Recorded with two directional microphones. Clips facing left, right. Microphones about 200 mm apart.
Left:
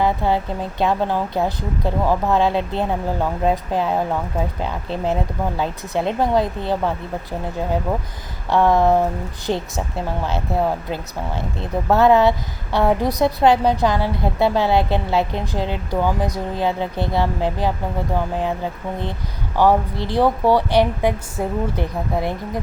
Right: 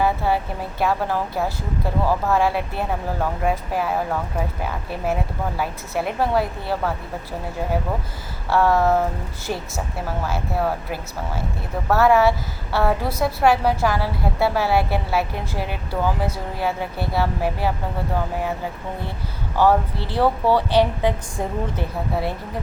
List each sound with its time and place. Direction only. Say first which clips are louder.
0.0 s a woman's voice: left 2 dB; 20° left (ahead or behind)
8.4 s a woman's voice: left 2 dB; 20° left (ahead or behind)
19.5 s a woman's voice: left 1 dB; 15° left (ahead or behind)